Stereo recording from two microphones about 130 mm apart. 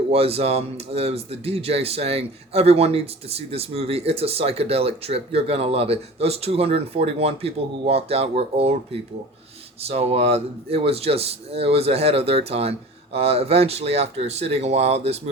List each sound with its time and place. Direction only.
0.1 s speech: 50° right (ahead or behind)
9.8 s speech: 50° right (ahead or behind)